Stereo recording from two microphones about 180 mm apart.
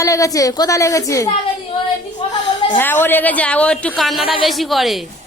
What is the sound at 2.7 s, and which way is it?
A man's voice, 10° left (ahead or behind).